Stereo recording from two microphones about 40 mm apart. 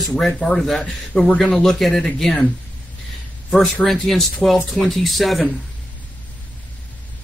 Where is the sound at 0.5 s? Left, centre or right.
Centre.